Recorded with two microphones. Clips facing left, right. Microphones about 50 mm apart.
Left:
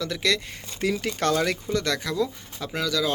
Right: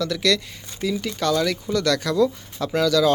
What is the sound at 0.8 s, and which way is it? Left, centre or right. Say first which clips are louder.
Speech: right 1 dB; left.